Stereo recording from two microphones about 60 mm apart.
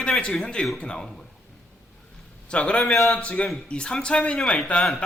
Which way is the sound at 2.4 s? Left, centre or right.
Centre.